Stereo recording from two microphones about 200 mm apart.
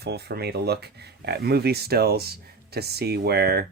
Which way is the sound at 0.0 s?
55° right (ahead or behind).